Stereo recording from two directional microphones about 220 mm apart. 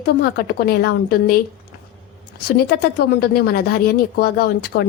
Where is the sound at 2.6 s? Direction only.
45° left (ahead or behind).